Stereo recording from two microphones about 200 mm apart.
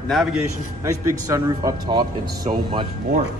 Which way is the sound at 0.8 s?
15° right (ahead or behind).